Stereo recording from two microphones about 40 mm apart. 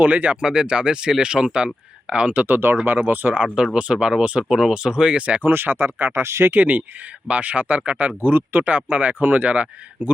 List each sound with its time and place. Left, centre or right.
0.0 s speech: right
0.3 s speech: right
2.6 s speech: right
3.1 s speech: right
3.3 s speech: right
3.9 s speech: centre
4.2 s speech: right
5.4 s speech: right
7.3 s speech: right
8.2 s speech: right
8.6 s speech: right